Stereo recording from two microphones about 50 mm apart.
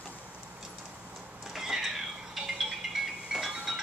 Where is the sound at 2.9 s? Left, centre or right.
Centre.